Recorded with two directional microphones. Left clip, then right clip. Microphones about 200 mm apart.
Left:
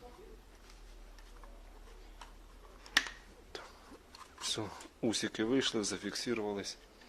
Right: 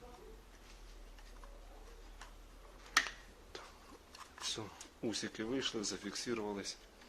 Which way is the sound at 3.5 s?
30° left (ahead or behind).